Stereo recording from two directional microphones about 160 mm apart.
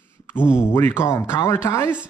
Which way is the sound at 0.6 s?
15° left (ahead or behind).